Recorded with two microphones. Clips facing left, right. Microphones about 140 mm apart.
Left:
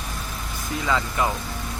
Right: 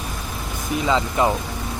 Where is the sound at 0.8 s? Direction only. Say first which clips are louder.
Right 4 dB; 20° right (ahead or behind).